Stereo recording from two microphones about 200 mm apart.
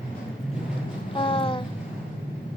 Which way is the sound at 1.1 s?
25° left (ahead or behind).